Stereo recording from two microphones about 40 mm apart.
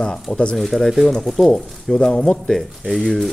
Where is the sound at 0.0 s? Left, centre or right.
Left.